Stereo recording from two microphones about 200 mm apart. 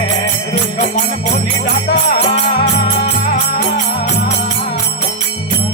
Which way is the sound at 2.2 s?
35° left (ahead or behind).